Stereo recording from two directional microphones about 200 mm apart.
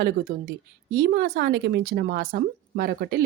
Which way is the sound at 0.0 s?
45° right (ahead or behind).